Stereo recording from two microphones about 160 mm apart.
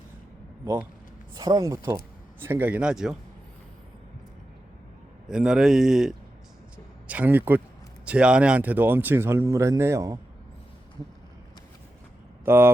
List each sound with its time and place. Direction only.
0.6 s a man's voice: 15° right (ahead or behind)
5.3 s a man's voice: 5° right (ahead or behind)
12.5 s a man's voice: 15° right (ahead or behind)